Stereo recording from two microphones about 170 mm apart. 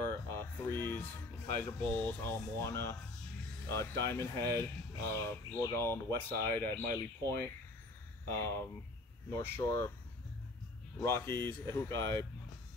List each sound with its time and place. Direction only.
0.0 s a sound: 15° left (ahead or behind)
1.6 s speech: 15° left (ahead or behind)
11.0 s speech: 15° left (ahead or behind)